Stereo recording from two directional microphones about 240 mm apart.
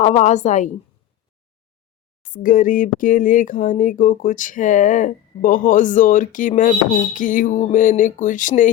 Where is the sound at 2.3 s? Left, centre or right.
Left.